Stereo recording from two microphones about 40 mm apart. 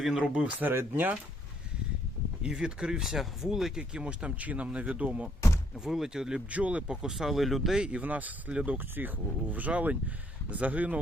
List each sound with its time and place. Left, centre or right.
0.2 s speech: right
0.9 s speech: right
2.4 s speech: right
3.9 s speech: right
4.4 s speech: right
5.8 s speech: centre
6.5 s speech: right
6.8 s speech: centre
7.1 s speech: centre
7.8 s speech: right
8.0 s speech: right
9.0 s speech: right